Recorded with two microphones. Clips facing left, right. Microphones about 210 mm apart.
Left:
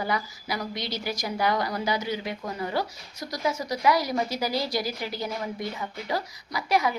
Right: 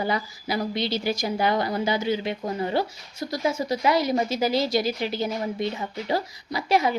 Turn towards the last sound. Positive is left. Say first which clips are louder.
# right 3 dB
turn(degrees=-25)  # may be behind; listen again after turning